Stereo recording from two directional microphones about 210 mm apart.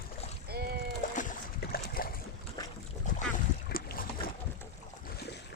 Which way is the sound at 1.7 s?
45° left (ahead or behind).